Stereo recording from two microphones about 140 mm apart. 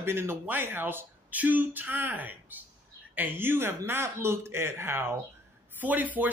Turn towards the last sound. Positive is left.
turn(degrees=-10)  # may be behind; listen again after turning